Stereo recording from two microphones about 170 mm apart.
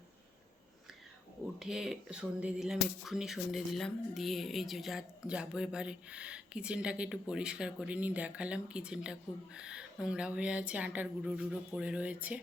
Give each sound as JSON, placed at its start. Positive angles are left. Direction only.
{"t": 1.5, "sound": "speech", "side_deg": -5}